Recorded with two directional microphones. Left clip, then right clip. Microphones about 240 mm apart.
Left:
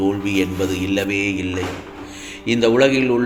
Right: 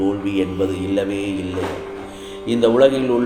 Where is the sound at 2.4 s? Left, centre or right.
Left.